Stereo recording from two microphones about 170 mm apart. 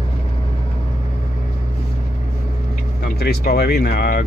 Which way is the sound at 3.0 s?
60° left (ahead or behind).